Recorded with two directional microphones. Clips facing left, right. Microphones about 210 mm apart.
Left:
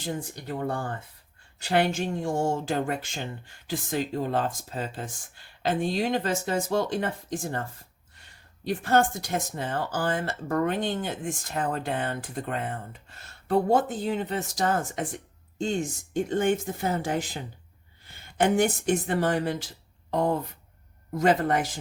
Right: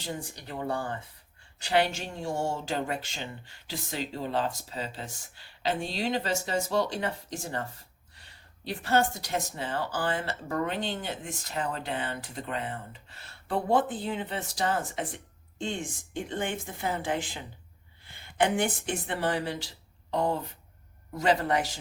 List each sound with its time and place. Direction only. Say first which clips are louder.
0.0 s speech: left 4 dB; 50° left (ahead or behind)
8.6 s a woman's voice: left 3 dB; 45° left (ahead or behind)